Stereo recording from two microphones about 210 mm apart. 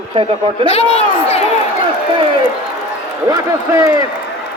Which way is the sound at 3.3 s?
15° right (ahead or behind).